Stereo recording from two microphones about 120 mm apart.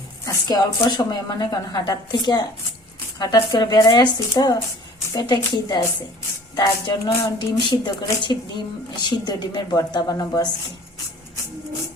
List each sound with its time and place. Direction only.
0.3 s a woman's voice: 35° left (ahead or behind)